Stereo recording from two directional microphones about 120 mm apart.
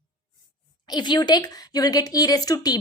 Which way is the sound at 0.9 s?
40° left (ahead or behind).